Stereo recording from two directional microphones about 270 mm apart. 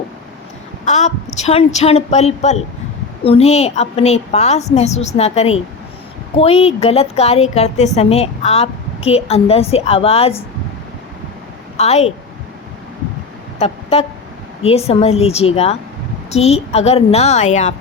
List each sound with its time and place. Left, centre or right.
0.9 s a woman's voice: left
11.8 s a woman's voice: left
13.6 s a woman's voice: left